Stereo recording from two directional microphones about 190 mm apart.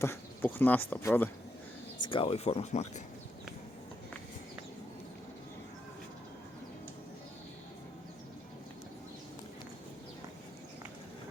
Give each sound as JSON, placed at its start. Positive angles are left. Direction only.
{"t": 0.0, "sound": "speech", "side_deg": 10}
{"t": 2.0, "sound": "speech", "side_deg": 30}